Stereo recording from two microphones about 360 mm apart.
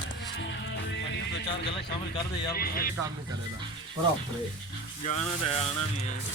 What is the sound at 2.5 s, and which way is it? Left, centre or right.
Music, left.